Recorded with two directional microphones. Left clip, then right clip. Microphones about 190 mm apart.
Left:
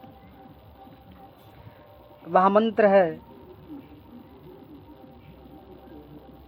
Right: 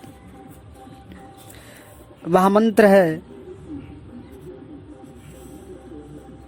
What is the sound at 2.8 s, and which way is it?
Mantra, 45° right (ahead or behind).